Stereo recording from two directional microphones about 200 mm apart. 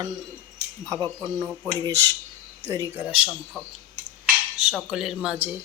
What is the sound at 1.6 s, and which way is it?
A woman's voice, 15° right (ahead or behind).